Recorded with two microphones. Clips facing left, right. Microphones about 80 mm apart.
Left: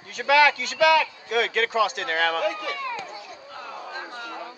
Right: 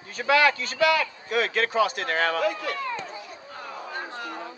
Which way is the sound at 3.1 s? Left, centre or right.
Right.